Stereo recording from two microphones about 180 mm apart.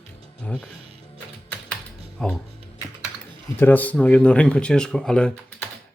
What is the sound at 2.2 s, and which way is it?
Speech, 5° left (ahead or behind).